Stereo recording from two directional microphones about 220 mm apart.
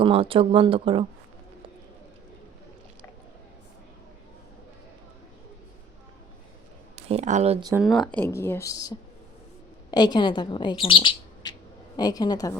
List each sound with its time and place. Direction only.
0.0 s speech: 25° right (ahead or behind)
6.9 s speech: 30° right (ahead or behind)
7.8 s speech: centre (ahead or behind); by 12.5 s 15° left (ahead or behind)